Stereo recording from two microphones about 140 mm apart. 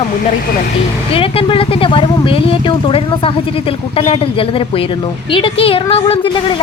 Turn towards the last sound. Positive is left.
turn(degrees=40)  # may be behind; listen again after turning